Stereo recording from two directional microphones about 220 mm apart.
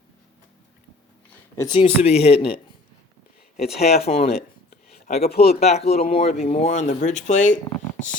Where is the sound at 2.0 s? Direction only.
30° left (ahead or behind).